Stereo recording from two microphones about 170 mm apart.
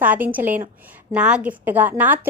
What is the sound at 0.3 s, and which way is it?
A woman's voice, 10° right (ahead or behind).